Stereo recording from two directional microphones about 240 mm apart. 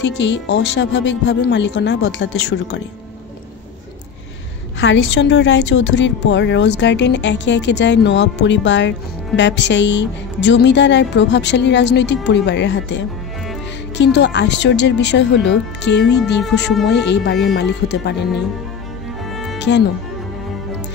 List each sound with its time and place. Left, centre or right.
0.0 s a woman's voice: left
4.7 s a woman's voice: left
19.3 s music: centre